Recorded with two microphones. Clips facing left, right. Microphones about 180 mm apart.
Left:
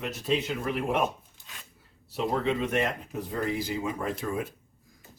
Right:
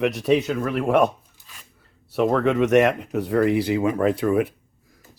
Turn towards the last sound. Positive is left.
turn(degrees=-70)  # may be behind; listen again after turning